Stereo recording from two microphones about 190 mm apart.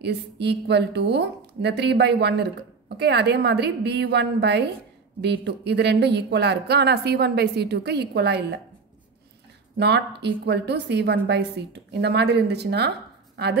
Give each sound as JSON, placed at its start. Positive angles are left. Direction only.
{"t": 0.0, "sound": "a woman's voice", "side_deg": -60}
{"t": 9.8, "sound": "a woman's voice", "side_deg": -60}